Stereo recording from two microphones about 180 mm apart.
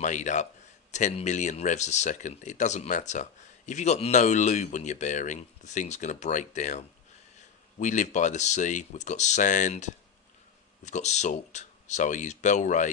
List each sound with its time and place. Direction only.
0.0 s speech: 45° left (ahead or behind)
7.8 s speech: 45° left (ahead or behind)